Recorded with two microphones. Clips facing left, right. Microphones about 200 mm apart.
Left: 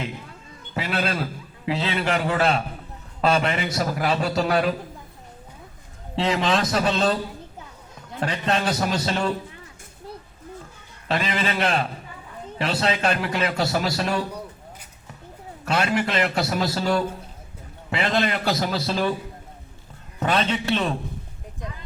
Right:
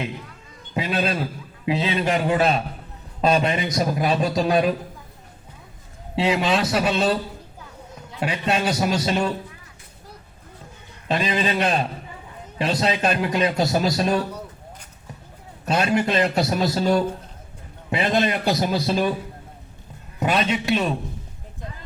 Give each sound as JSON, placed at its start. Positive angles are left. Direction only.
{"t": 0.7, "sound": "a man's voice", "side_deg": -15}
{"t": 6.1, "sound": "a man's voice", "side_deg": -10}
{"t": 8.2, "sound": "a man's voice", "side_deg": -10}
{"t": 11.1, "sound": "a man's voice", "side_deg": -20}
{"t": 15.6, "sound": "a man's voice", "side_deg": -20}
{"t": 20.1, "sound": "a man's voice", "side_deg": -10}